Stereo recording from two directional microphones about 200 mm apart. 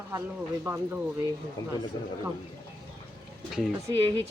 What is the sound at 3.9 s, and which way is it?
Speech, 20° right (ahead or behind).